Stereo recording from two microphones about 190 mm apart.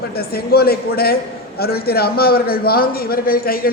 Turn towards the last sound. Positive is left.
turn(degrees=50)  # may be behind; listen again after turning